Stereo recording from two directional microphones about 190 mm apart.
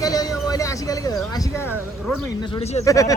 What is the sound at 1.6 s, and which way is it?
Speech, 10° right (ahead or behind).